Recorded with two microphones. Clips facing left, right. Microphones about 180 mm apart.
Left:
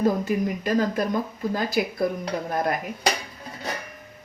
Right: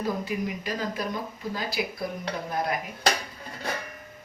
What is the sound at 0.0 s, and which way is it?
A woman's voice, 45° left (ahead or behind).